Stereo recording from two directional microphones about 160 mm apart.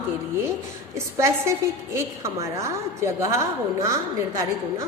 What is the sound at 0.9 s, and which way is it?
A woman's voice, 20° right (ahead or behind).